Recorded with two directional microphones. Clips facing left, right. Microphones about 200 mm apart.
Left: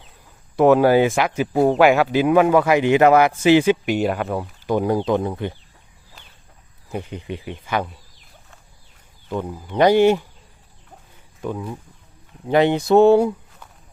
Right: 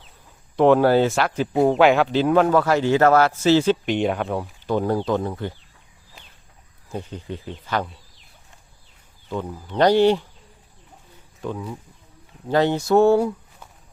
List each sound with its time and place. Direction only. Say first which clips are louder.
0.5 s a man's voice: left 2 dB; 10° left (ahead or behind)
4.7 s a man's voice: left 2 dB; 15° left (ahead or behind)
6.9 s a man's voice: left 2 dB; 15° left (ahead or behind)
9.3 s a man's voice: left 2 dB; 10° left (ahead or behind)
11.4 s a man's voice: left 2 dB; 10° left (ahead or behind)